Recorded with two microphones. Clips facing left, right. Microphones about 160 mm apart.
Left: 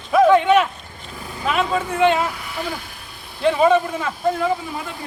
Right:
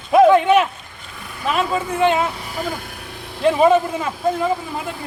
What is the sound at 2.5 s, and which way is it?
Vehicle, 45° right (ahead or behind).